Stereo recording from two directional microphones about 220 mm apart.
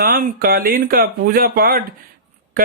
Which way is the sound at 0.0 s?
40° right (ahead or behind).